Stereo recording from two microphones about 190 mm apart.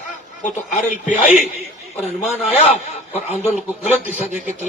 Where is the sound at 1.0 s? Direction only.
40° left (ahead or behind).